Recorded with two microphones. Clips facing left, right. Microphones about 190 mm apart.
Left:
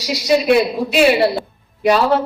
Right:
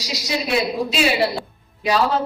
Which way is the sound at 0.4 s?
60° left (ahead or behind).